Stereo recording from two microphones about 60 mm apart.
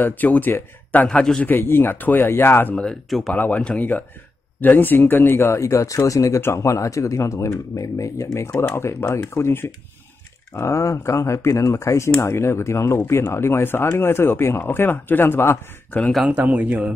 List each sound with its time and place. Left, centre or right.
0.0 s speech: left
1.0 s a man's voice: centre
1.4 s speech: left
2.2 s speech: left
2.7 s a man's voice: centre
3.1 s speech: centre
3.3 s speech: left
6.4 s speech: left
10.5 s speech: left
16.3 s a man's voice: right